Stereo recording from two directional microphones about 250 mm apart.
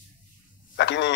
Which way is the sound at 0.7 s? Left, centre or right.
Left.